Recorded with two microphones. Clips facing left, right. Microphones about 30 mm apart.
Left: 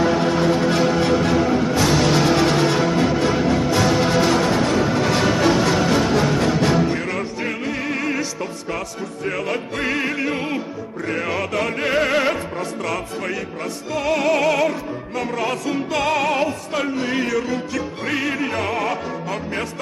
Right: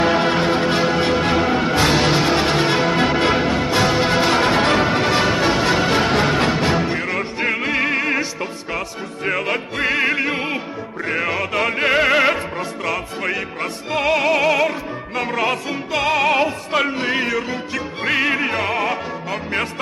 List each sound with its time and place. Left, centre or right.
0.0 s music: right
0.7 s music: right
1.3 s music: right
2.1 s music: right
2.9 s music: right
5.1 s music: right
6.0 s music: right
6.6 s music: right
7.6 s music: right
8.0 s music: right
9.8 s music: right
15.7 s music: centre
18.6 s music: centre